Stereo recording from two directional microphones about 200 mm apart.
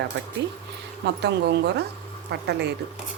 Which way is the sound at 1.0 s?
60° right (ahead or behind).